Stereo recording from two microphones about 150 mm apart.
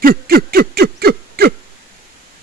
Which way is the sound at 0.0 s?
80° right.